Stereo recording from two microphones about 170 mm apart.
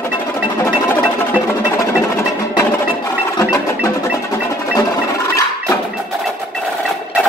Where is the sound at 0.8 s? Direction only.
15° left (ahead or behind).